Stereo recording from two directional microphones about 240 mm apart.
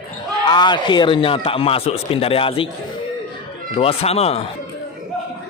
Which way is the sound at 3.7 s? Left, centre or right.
Left.